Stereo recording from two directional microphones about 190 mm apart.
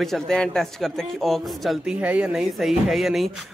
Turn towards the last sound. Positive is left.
turn(degrees=0)  # may be behind; listen again after turning